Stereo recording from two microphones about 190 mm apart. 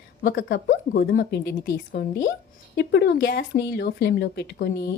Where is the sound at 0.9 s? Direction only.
50° left (ahead or behind).